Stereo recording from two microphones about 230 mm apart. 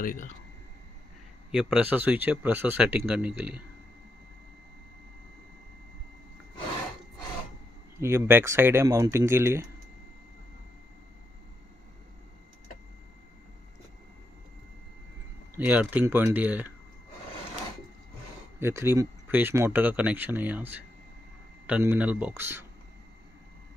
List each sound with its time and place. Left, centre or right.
0.0 s speech: left
1.5 s speech: centre
8.0 s speech: centre
15.5 s speech: centre
18.6 s speech: centre